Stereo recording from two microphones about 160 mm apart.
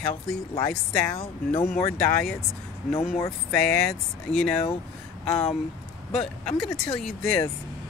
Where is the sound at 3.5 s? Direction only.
5° left (ahead or behind).